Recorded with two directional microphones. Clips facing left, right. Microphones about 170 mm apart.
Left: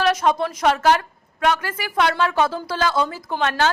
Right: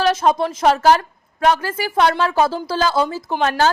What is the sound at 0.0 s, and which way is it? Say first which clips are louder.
A woman's voice: right 2 dB; 30° right (ahead or behind).